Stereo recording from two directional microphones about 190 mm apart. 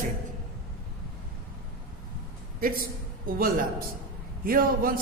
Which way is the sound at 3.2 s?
50° right (ahead or behind).